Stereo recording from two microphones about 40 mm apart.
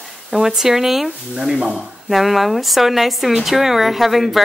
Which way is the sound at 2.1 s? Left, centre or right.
Centre.